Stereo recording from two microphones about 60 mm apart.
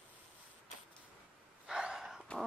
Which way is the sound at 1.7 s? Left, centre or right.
Centre.